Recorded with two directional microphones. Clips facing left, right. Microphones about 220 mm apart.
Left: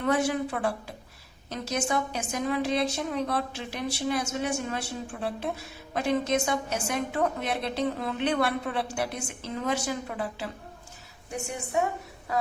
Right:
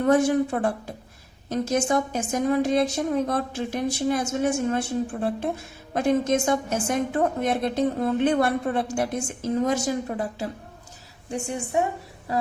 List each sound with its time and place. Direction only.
0.0 s a woman's voice: 45° right (ahead or behind)
11.3 s a woman's voice: 30° right (ahead or behind)